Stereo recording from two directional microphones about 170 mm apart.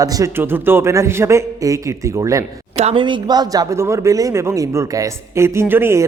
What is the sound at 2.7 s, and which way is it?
Speech, 40° right (ahead or behind).